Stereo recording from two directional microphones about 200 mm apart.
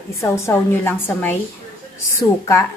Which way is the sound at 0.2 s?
15° left (ahead or behind).